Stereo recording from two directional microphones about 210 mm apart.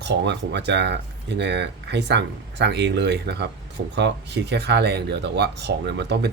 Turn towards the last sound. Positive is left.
turn(degrees=-50)  # may be behind; listen again after turning